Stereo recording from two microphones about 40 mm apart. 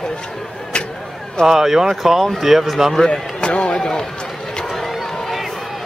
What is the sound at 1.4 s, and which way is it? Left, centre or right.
Speech, centre.